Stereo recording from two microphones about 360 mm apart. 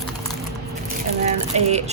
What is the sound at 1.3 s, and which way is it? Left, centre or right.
Speech, centre.